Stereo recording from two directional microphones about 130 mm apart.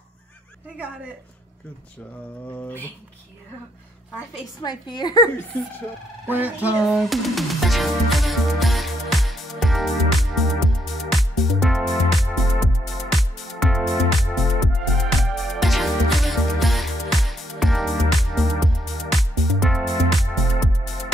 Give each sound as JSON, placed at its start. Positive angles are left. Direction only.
{"t": 2.5, "sound": "a sound", "side_deg": 15}
{"t": 4.6, "sound": "a woman's voice", "side_deg": 35}
{"t": 6.2, "sound": "music", "side_deg": -15}